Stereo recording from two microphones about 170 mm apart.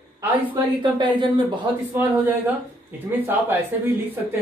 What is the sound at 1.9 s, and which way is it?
Speech, 10° right (ahead or behind).